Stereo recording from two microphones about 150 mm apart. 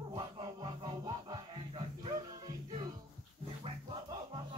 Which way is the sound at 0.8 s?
25° right (ahead or behind).